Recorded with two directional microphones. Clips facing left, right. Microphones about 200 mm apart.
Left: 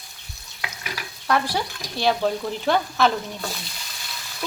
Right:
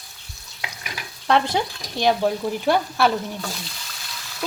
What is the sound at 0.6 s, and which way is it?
Stir, 25° right (ahead or behind).